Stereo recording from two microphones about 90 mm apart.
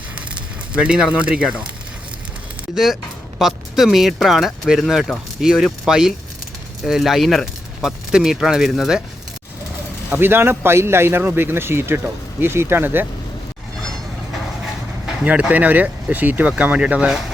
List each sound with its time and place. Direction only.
0.7 s speech: 10° right (ahead or behind)
2.7 s speech: 5° right (ahead or behind)
10.1 s a man's voice: 25° right (ahead or behind)
15.2 s speech: 15° right (ahead or behind)